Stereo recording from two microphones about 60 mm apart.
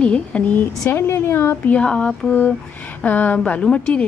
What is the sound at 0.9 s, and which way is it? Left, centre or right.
Speech, left.